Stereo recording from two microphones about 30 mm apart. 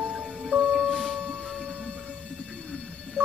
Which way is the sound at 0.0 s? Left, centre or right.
Centre.